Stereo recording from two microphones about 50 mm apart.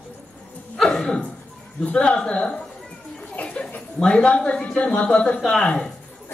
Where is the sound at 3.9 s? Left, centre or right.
Centre.